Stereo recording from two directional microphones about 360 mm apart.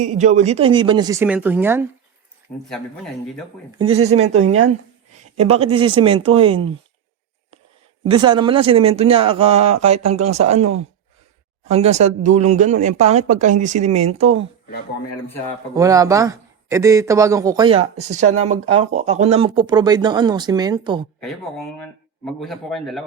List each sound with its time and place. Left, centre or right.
0.1 s speech: centre
3.8 s speech: centre
8.0 s speech: centre
9.9 s speech: right
10.4 s speech: centre
15.7 s speech: centre
21.2 s speech: centre